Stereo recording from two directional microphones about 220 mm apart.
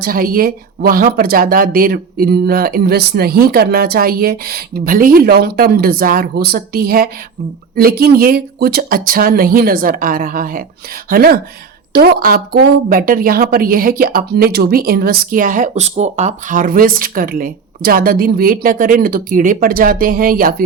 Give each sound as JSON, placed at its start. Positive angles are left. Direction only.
{"t": 0.0, "sound": "a woman's voice", "side_deg": -40}